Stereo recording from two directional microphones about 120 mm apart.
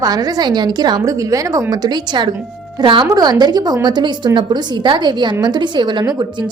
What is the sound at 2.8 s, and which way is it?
Speech, 45° right (ahead or behind).